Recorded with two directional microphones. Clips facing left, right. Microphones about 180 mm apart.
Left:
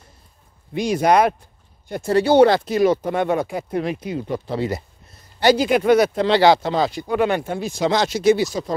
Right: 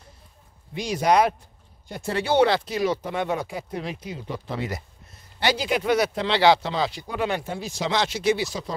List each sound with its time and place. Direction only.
0.7 s speech: 55° left (ahead or behind)
4.6 s speech: 30° left (ahead or behind)
5.4 s speech: 45° left (ahead or behind)